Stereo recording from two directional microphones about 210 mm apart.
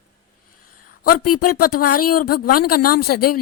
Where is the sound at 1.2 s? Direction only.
90° left.